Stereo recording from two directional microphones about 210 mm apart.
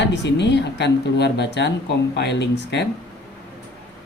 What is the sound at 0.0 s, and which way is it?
Speech, 55° left (ahead or behind).